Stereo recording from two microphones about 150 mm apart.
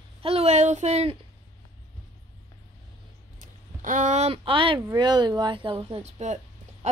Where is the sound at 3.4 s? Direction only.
60° right (ahead or behind).